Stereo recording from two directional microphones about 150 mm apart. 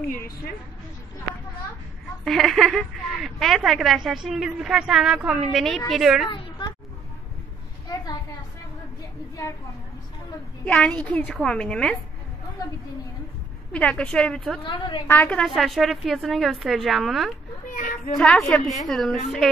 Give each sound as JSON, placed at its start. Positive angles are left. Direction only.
{"t": 2.2, "sound": "a woman's voice", "side_deg": 0}
{"t": 6.2, "sound": "a sound", "side_deg": 35}
{"t": 10.6, "sound": "a woman's voice", "side_deg": 5}
{"t": 13.7, "sound": "a woman's voice", "side_deg": 5}
{"t": 14.6, "sound": "a woman's voice", "side_deg": 35}
{"t": 15.0, "sound": "a woman's voice", "side_deg": 10}
{"t": 17.6, "sound": "a sound", "side_deg": 60}
{"t": 18.1, "sound": "a woman's voice", "side_deg": 5}